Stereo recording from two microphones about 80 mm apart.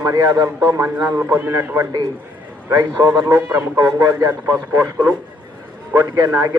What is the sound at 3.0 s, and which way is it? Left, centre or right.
A man's voice, right.